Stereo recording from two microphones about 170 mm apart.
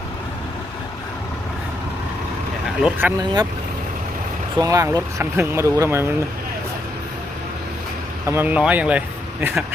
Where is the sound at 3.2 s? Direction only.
25° right (ahead or behind).